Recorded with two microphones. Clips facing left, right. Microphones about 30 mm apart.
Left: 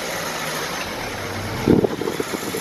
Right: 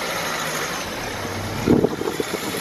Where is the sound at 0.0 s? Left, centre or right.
Right.